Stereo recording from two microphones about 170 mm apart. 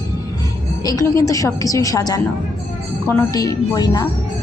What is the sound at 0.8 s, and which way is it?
Speech, 20° left (ahead or behind).